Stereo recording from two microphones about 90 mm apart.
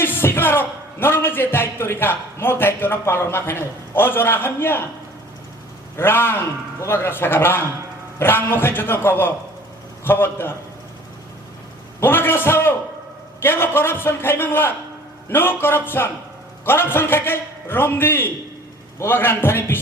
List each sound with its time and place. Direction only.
0.0 s a man's voice: 25° left (ahead or behind)
6.0 s a man's voice: 25° left (ahead or behind)
11.9 s a man's voice: 25° left (ahead or behind)